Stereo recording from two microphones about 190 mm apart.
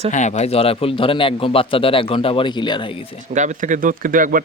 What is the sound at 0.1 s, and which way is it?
A man's voice, 40° left (ahead or behind).